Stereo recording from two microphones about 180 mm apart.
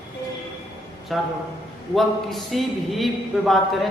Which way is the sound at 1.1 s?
Centre (ahead or behind).